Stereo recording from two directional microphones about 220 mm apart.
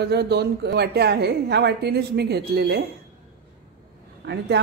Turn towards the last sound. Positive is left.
turn(degrees=-50)  # may be behind; listen again after turning